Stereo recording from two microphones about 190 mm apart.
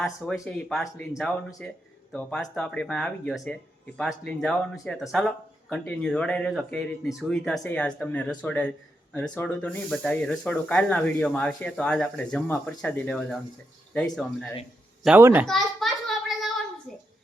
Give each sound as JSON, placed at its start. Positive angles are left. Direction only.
{"t": 0.4, "sound": "speech", "side_deg": 5}
{"t": 15.0, "sound": "a child's voice", "side_deg": -10}
{"t": 15.4, "sound": "a sound", "side_deg": 0}